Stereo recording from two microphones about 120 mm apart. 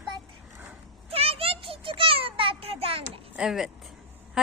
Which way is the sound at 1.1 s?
55° right (ahead or behind).